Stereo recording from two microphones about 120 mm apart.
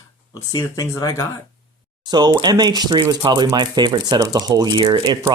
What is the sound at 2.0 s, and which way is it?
Speech, 35° right (ahead or behind).